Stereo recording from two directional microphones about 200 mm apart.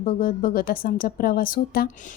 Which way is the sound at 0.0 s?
45° left (ahead or behind).